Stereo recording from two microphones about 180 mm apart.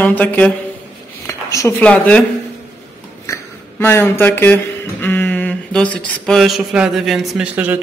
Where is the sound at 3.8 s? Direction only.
10° left (ahead or behind).